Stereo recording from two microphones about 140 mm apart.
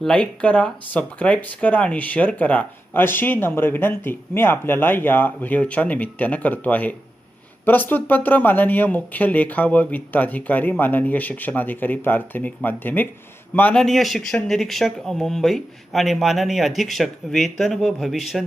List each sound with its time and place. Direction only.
0.0 s speech: 5° left (ahead or behind)
13.8 s speech: centre (ahead or behind)